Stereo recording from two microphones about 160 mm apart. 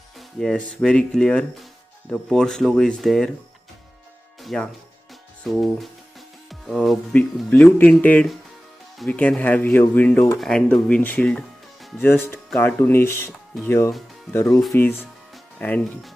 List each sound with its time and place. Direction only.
0.4 s speech: 5° left (ahead or behind)
4.4 s music: centre (ahead or behind)
5.4 s speech: centre (ahead or behind)